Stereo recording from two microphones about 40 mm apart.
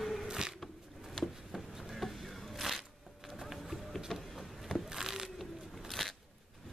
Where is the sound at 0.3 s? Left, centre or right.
Centre.